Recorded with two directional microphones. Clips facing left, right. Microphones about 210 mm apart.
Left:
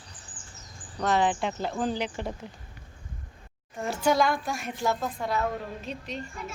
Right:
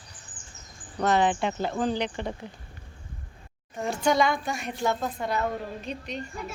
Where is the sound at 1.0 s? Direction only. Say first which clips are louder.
Right 2 dB; centre (ahead or behind).